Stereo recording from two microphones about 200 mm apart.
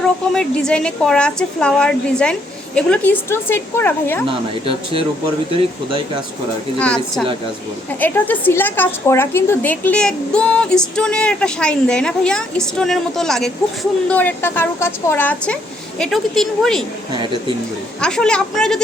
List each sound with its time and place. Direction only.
0.3 s a woman's voice: 5° left (ahead or behind)
4.3 s speech: 25° right (ahead or behind)
6.7 s a woman's voice: 5° left (ahead or behind)
18.0 s a woman's voice: 5° left (ahead or behind)